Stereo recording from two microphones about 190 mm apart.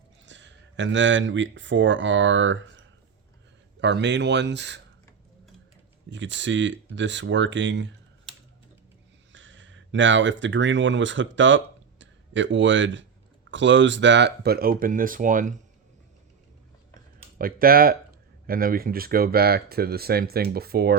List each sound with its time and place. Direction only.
0.3 s speech: 70° right (ahead or behind)
3.8 s speech: 65° right (ahead or behind)
6.1 s speech: 70° right (ahead or behind)
9.3 s speech: 75° right (ahead or behind); by 15.5 s 45° right (ahead or behind)
17.3 s speech: 50° right (ahead or behind)